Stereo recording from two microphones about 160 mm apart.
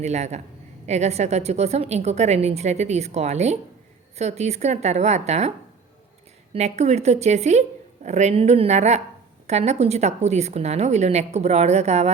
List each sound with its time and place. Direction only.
0.0 s a woman's voice: 45° right (ahead or behind)
6.5 s a woman's voice: 40° right (ahead or behind)